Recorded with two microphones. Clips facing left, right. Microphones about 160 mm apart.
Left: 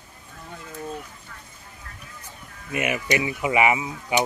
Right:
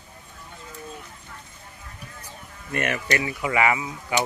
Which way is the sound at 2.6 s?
10° left (ahead or behind).